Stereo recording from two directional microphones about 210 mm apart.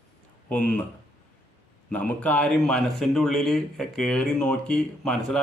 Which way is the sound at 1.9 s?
5° left (ahead or behind).